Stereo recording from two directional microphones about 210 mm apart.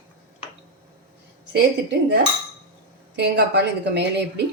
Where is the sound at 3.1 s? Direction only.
55° right (ahead or behind).